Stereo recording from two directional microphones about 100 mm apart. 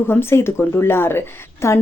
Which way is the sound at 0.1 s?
25° left (ahead or behind).